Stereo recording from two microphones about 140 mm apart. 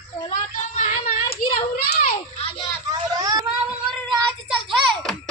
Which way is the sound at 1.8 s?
90° left.